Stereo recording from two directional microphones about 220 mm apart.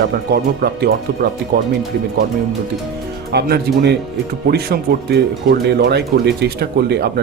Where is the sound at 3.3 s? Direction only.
50° right (ahead or behind).